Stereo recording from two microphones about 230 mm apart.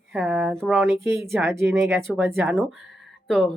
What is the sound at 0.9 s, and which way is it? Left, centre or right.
A woman's voice, centre.